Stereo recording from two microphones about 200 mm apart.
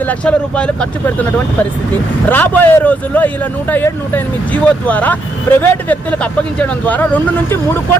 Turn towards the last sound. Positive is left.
turn(degrees=10)  # may be behind; listen again after turning